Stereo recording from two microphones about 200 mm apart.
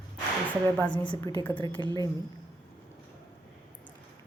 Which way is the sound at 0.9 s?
20° left (ahead or behind).